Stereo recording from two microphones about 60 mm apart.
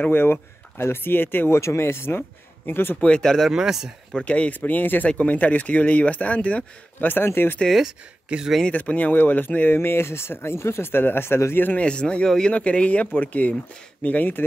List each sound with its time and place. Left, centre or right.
0.1 s speech: left
1.5 s speech: left
3.0 s speech: centre
3.4 s speech: centre
4.2 s speech: left
8.3 s speech: centre
8.7 s speech: left
11.8 s speech: centre